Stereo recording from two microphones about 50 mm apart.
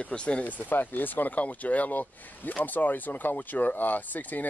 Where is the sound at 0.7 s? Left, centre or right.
Left.